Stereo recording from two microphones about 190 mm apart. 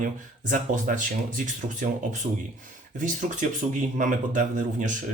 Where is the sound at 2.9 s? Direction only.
40° right (ahead or behind).